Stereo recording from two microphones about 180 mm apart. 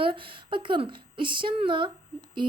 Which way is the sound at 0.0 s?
30° right (ahead or behind).